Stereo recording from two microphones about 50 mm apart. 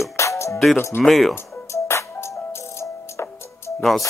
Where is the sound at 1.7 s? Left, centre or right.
Left.